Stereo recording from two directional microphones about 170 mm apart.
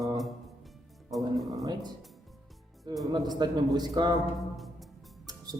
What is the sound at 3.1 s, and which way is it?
A man's voice, 25° right (ahead or behind).